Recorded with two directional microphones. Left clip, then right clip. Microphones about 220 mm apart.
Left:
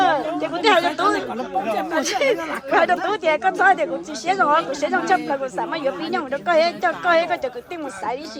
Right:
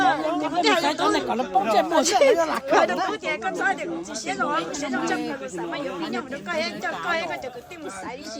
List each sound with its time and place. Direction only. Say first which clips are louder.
0.0 s chatter: left 2 dB; 10° left (ahead or behind)
1.9 s speech: right 1 dB; 5° right (ahead or behind)
2.3 s speech: right 3 dB; 45° right (ahead or behind)
2.6 s speech: left 6 dB; centre (ahead or behind)